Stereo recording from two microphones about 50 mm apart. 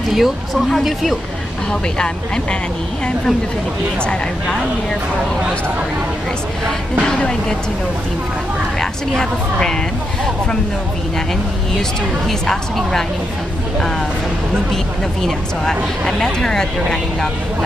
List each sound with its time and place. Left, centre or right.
0.1 s speech: centre
7.2 s speech: centre
9.1 s speech: centre
12.3 s speech: centre
15.2 s speech: centre